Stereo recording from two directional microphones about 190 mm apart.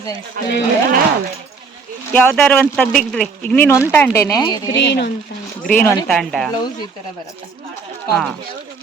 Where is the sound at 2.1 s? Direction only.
10° left (ahead or behind).